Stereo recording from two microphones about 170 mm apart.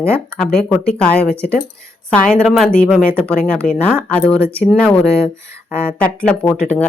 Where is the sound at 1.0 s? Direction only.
5° left (ahead or behind).